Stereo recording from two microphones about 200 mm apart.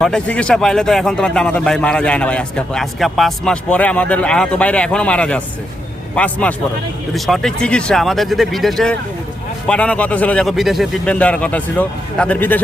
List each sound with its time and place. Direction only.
0.0 s a man's voice: 5° left (ahead or behind)